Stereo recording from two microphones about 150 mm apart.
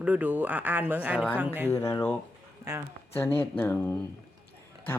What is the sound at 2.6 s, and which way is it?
Speech, 20° right (ahead or behind).